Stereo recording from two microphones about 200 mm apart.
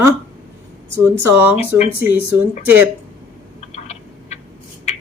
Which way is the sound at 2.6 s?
10° right (ahead or behind).